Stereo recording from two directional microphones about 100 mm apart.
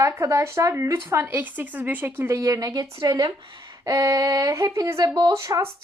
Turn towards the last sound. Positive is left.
turn(degrees=-30)  # may be behind; listen again after turning